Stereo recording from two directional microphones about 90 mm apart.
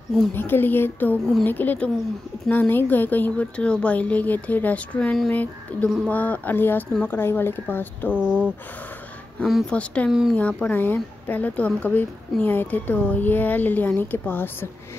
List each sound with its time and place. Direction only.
0.3 s speech: 25° left (ahead or behind)
8.1 s speech: 15° right (ahead or behind)
9.7 s speech: 10° left (ahead or behind)